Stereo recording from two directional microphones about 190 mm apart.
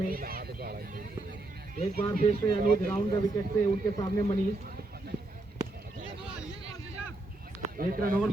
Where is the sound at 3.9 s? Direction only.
20° left (ahead or behind).